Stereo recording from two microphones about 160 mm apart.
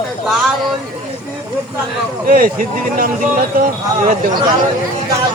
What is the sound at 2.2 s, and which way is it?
Speech, 60° right (ahead or behind).